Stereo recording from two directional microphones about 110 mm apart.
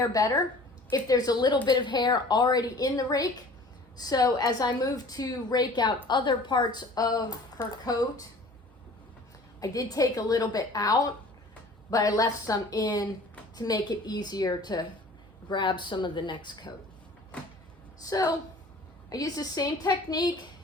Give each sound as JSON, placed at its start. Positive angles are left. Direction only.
{"t": 0.1, "sound": "a woman's voice", "side_deg": 30}
{"t": 9.6, "sound": "a woman's voice", "side_deg": 35}
{"t": 18.0, "sound": "a woman's voice", "side_deg": 30}